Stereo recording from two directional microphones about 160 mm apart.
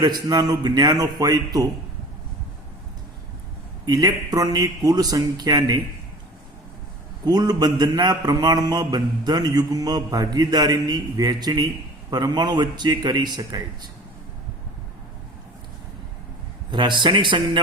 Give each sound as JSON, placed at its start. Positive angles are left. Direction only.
{"t": 0.0, "sound": "a man's voice", "side_deg": -25}
{"t": 3.8, "sound": "a man's voice", "side_deg": -25}
{"t": 7.3, "sound": "a man's voice", "side_deg": -25}
{"t": 16.7, "sound": "a man's voice", "side_deg": -30}